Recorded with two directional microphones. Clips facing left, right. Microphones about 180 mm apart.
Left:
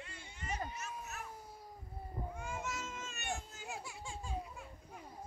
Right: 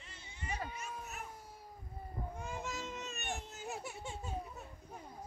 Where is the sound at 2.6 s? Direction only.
20° right (ahead or behind).